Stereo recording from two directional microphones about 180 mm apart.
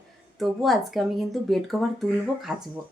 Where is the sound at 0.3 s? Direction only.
Centre (ahead or behind).